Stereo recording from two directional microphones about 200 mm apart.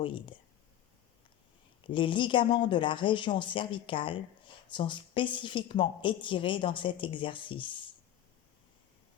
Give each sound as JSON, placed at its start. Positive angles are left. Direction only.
{"t": 0.0, "sound": "a woman's voice", "side_deg": 25}
{"t": 1.9, "sound": "a woman's voice", "side_deg": 25}